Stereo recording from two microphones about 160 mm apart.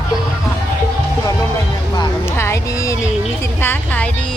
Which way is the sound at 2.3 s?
15° left (ahead or behind).